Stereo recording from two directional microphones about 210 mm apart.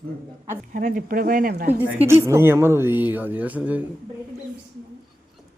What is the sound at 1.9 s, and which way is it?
Speech, 10° right (ahead or behind).